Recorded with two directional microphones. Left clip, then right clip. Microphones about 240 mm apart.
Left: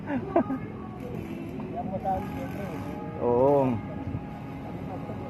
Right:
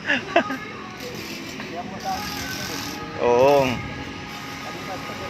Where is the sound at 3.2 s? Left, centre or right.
Right.